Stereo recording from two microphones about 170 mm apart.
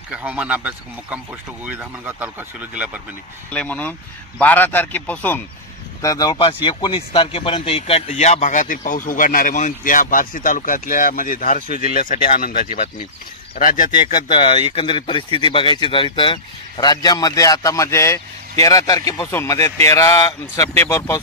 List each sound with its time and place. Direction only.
0.1 s speech: 10° right (ahead or behind)
3.5 s speech: 10° left (ahead or behind)
6.0 s speech: 20° left (ahead or behind); by 13.9 s 55° left (ahead or behind)
14.3 s speech: 30° left (ahead or behind); by 21.2 s 15° left (ahead or behind)